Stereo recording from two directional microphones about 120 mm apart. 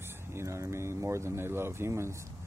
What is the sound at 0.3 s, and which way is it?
Speech, 25° right (ahead or behind).